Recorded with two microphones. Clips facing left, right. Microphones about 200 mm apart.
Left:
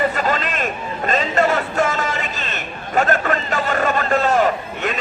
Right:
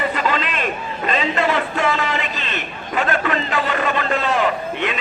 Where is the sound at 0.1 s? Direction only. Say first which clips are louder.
Even; 45° left (ahead or behind).